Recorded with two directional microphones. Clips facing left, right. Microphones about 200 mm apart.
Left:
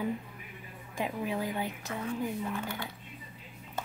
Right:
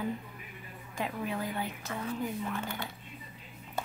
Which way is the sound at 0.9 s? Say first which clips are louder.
Left 2 dB; 15° left (ahead or behind).